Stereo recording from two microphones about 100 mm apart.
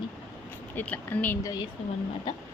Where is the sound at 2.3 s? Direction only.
50° left (ahead or behind).